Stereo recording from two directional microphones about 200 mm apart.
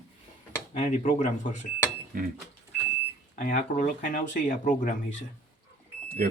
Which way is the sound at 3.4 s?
40° left (ahead or behind).